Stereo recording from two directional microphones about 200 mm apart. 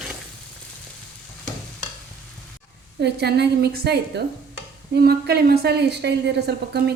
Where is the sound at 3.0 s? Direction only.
55° right (ahead or behind).